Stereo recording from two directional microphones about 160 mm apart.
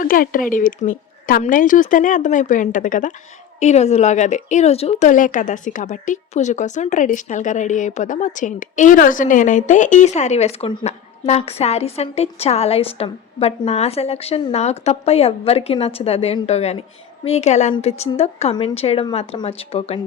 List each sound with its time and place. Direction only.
0.0 s a woman's voice: 60° left (ahead or behind); by 20.0 s 40° left (ahead or behind)